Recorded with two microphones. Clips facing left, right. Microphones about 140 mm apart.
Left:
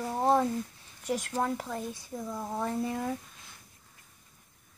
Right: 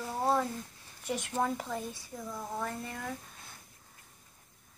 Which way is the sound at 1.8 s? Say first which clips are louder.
Left 4 dB; 15° left (ahead or behind).